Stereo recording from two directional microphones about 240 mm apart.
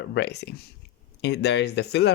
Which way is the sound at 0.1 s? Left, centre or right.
Left.